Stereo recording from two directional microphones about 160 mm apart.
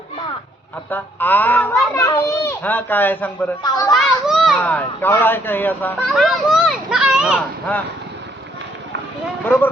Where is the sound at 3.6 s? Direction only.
25° left (ahead or behind).